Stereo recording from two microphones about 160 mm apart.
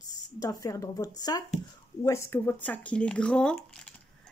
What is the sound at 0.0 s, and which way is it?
A woman's voice, 20° left (ahead or behind).